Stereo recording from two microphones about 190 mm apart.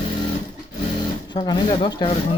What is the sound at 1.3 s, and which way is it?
Speech, 25° left (ahead or behind).